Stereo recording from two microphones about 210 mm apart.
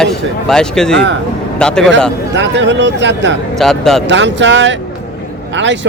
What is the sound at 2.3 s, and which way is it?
Speech, 55° right (ahead or behind).